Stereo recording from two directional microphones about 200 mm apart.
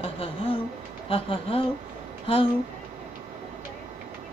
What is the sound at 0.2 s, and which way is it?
Speech, 25° left (ahead or behind).